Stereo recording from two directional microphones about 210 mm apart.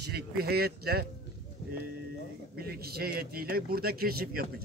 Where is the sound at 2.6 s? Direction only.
45° right (ahead or behind).